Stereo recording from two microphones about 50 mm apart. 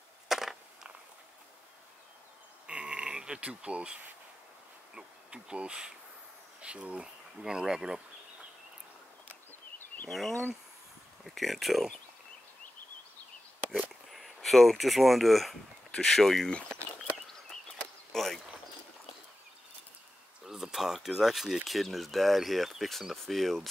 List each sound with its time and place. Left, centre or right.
0.3 s a sound: centre
2.6 s a sound: centre
3.3 s speech: right
10.0 s speech: centre
14.1 s speech: centre
18.1 s speech: centre
20.4 s speech: centre
21.6 s speech: centre